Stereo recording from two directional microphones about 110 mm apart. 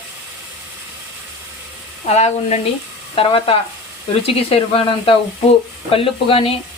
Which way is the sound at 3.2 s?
55° left (ahead or behind).